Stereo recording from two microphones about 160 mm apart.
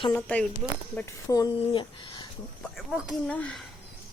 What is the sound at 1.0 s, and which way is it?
Speech, 20° left (ahead or behind).